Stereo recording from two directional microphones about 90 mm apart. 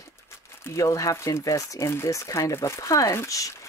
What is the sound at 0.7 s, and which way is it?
Speech, 35° left (ahead or behind).